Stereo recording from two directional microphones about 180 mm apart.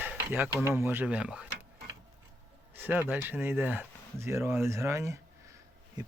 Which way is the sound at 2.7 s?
10° right (ahead or behind).